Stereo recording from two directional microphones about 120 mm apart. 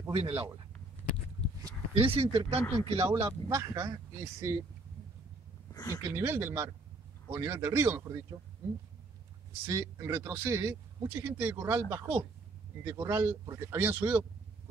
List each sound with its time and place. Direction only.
0.1 s speech: 50° right (ahead or behind)
2.0 s speech: 50° right (ahead or behind)
2.6 s speech: 25° left (ahead or behind)
2.9 s speech: 50° right (ahead or behind)
3.3 s speech: 25° right (ahead or behind)
5.7 s a sound: 30° left (ahead or behind)
6.0 s speech: 20° right (ahead or behind)
9.7 s speech: 25° right (ahead or behind)